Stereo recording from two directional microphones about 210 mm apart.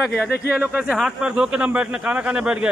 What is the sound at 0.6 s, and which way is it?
Speech, 5° right (ahead or behind).